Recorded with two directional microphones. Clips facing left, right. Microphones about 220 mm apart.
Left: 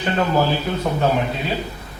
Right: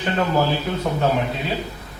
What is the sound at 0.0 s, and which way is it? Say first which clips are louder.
A man's voice: left 1 dB; 15° left (ahead or behind).